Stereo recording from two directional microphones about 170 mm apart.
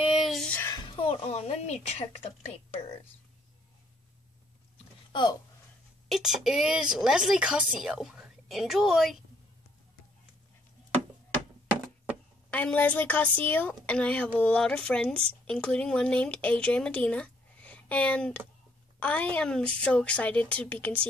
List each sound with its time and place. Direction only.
0.0 s a sound: 5° right (ahead or behind)
0.7 s speech: 25° left (ahead or behind)
5.1 s speech: 25° left (ahead or behind)
6.0 s a woman's voice: centre (ahead or behind)
12.4 s a woman's voice: 10° left (ahead or behind)